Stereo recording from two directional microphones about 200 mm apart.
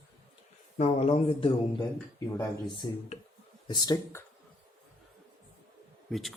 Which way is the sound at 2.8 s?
20° left (ahead or behind).